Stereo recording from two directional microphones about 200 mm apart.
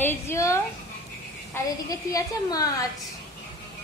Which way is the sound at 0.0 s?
10° left (ahead or behind).